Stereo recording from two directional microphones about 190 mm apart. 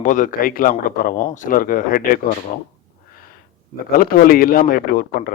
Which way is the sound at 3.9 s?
50° left (ahead or behind).